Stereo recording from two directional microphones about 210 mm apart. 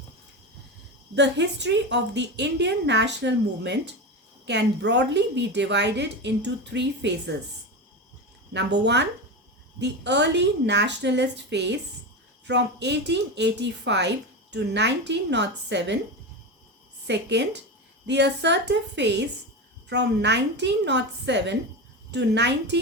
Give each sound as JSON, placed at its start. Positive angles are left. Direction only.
{"t": 1.1, "sound": "a woman's voice", "side_deg": -55}
{"t": 8.5, "sound": "a woman's voice", "side_deg": -55}
{"t": 17.1, "sound": "a woman's voice", "side_deg": -55}